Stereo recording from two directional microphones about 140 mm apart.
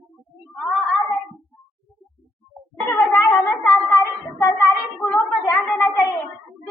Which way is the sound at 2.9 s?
20° left (ahead or behind).